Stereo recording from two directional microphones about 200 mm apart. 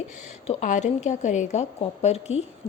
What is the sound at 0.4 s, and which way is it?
A woman's voice, 40° left (ahead or behind).